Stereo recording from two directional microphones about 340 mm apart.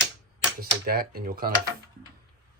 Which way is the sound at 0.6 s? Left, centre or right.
Right.